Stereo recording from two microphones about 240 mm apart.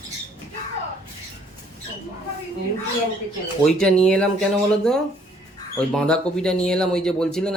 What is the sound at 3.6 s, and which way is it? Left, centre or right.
Speech, centre.